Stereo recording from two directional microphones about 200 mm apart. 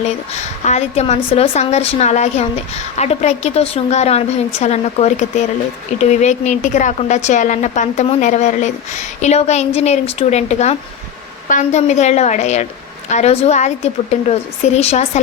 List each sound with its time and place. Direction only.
0.0 s a woman's voice: 35° left (ahead or behind)